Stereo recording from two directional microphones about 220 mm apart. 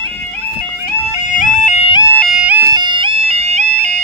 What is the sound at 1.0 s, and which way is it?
Music, 35° left (ahead or behind).